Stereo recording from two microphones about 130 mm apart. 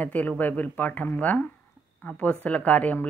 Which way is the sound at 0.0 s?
10° left (ahead or behind).